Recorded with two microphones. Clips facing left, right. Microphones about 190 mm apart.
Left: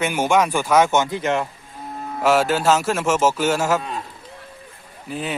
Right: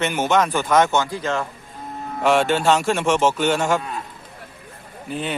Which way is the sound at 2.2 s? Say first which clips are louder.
Even; 5° left (ahead or behind).